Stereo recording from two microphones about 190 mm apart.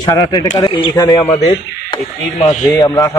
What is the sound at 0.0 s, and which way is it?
Speech, 20° left (ahead or behind).